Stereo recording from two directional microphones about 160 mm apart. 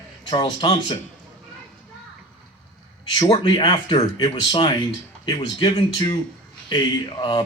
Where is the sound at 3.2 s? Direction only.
35° left (ahead or behind).